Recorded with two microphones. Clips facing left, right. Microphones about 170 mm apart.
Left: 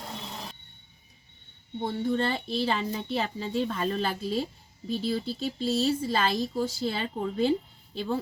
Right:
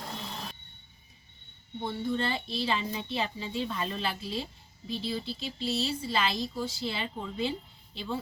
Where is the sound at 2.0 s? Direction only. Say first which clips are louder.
Left 3 dB; 45° left (ahead or behind).